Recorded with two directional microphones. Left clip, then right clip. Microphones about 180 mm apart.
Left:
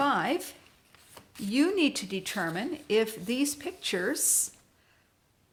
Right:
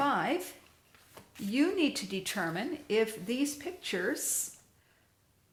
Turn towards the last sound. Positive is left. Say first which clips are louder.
# left 4 dB
turn(degrees=35)  # may be behind; listen again after turning